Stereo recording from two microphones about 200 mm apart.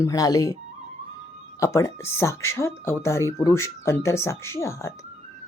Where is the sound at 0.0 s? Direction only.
20° left (ahead or behind).